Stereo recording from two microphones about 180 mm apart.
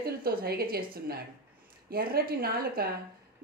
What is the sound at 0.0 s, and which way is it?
Speech, 55° right (ahead or behind).